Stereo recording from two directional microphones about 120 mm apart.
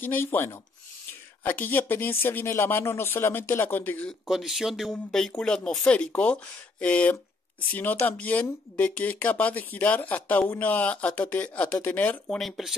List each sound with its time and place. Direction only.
0.0 s speech: 15° left (ahead or behind)
4.3 s speech: 5° right (ahead or behind); by 12.4 s 15° left (ahead or behind)
12.4 s speech: centre (ahead or behind)